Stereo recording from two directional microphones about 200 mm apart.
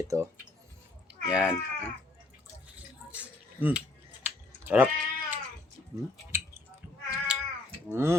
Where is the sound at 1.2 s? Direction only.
5° right (ahead or behind).